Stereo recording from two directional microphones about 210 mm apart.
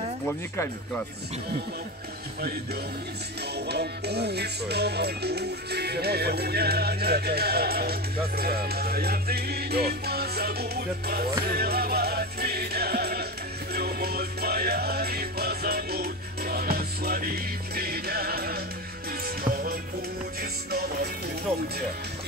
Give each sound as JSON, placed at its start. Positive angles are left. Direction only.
{"t": 0.3, "sound": "speech", "side_deg": 10}
{"t": 3.5, "sound": "music", "side_deg": -50}